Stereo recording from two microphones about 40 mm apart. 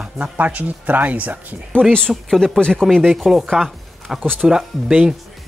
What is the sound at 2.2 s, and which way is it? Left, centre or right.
Speech, centre.